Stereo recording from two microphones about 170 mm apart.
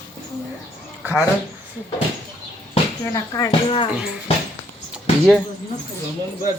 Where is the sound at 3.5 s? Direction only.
30° left (ahead or behind).